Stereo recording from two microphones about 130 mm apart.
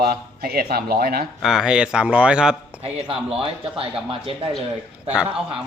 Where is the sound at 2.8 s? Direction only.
50° right (ahead or behind).